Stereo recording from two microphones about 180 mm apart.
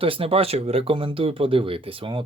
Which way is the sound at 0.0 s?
30° right (ahead or behind).